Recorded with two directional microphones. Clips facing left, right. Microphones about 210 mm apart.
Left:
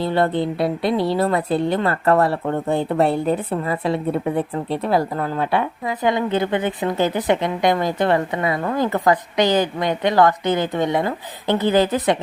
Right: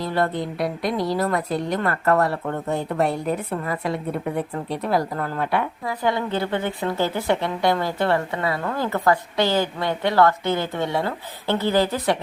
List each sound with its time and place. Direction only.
0.0 s a woman's voice: 25° left (ahead or behind)